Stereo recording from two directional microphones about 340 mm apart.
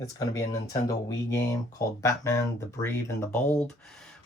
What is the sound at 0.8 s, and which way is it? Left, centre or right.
Speech, centre.